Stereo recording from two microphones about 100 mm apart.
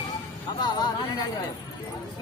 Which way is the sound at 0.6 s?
45° left (ahead or behind).